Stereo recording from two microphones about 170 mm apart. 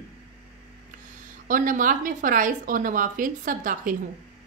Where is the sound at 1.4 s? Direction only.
50° right (ahead or behind).